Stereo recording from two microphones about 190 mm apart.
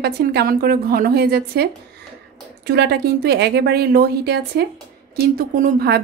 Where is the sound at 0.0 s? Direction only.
60° right (ahead or behind).